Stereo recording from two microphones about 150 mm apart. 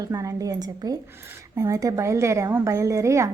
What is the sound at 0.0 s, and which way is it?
A woman's voice, 20° right (ahead or behind).